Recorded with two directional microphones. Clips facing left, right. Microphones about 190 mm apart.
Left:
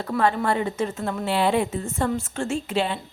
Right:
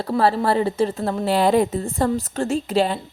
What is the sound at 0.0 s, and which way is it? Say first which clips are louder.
A woman's voice: right 3 dB; 35° right (ahead or behind).